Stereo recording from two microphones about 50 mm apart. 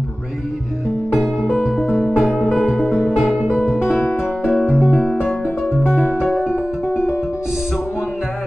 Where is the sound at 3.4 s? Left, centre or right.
Right.